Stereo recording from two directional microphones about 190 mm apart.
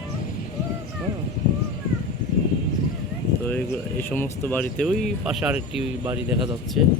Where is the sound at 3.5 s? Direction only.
10° left (ahead or behind).